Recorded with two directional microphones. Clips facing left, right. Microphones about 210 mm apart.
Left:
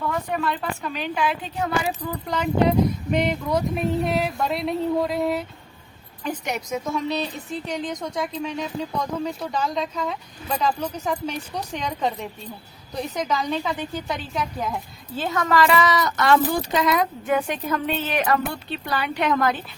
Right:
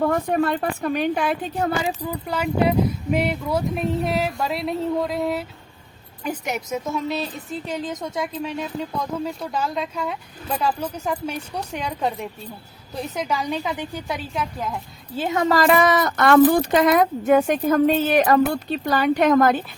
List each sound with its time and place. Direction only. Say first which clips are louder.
0.0 s speech: right 6 dB; 45° right (ahead or behind)
2.0 s speech: right 1 dB; 10° right (ahead or behind)
15.2 s a woman's voice: right 3 dB; 20° right (ahead or behind)
15.4 s speech: right 2 dB; 45° right (ahead or behind)